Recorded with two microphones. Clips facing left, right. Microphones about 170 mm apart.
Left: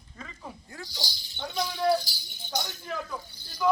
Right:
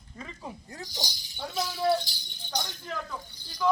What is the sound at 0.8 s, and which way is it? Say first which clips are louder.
Speech: right 3 dB; 20° right (ahead or behind).